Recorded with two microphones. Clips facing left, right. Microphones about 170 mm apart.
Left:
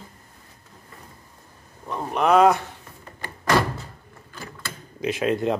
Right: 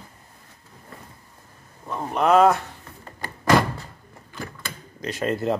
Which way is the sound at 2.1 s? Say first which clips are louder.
Even; centre (ahead or behind).